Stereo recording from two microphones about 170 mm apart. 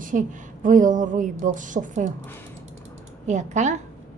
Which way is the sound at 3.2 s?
45° right (ahead or behind).